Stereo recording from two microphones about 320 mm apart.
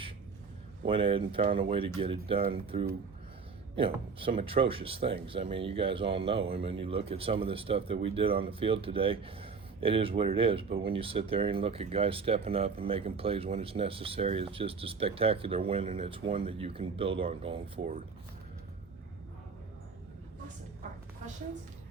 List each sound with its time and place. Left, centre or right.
0.9 s speech: centre